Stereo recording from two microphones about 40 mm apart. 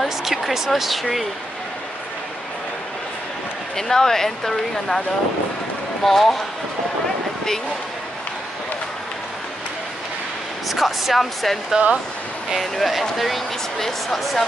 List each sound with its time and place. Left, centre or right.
0.2 s speech: centre
3.7 s speech: centre
6.0 s speech: centre
10.7 s speech: centre
11.7 s speech: right
12.7 s speech: centre